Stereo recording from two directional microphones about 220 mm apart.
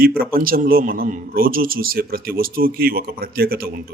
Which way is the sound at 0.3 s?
40° right (ahead or behind).